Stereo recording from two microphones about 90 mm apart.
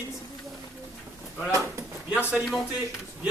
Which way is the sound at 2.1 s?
5° right (ahead or behind).